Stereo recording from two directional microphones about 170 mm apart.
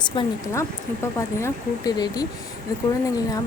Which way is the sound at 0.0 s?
25° left (ahead or behind).